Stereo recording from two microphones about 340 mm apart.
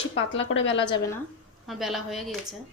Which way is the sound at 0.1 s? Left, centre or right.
Left.